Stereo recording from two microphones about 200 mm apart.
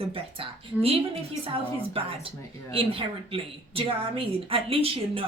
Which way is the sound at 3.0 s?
25° right (ahead or behind).